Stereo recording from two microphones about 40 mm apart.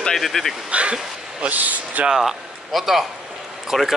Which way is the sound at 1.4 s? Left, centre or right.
Right.